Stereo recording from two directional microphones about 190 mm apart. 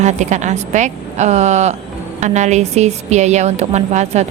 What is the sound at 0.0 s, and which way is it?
A woman's voice, 40° right (ahead or behind).